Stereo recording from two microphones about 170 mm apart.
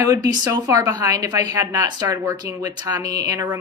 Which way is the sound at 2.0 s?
15° right (ahead or behind).